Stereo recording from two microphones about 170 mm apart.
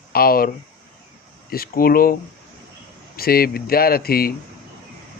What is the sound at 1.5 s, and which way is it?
Speech, 60° left (ahead or behind).